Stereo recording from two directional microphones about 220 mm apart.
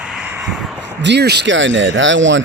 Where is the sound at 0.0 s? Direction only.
5° right (ahead or behind).